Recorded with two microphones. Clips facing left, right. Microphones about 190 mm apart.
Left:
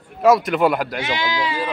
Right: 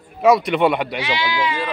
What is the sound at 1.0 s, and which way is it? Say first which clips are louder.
Speech: right 1 dB; 45° left (ahead or behind).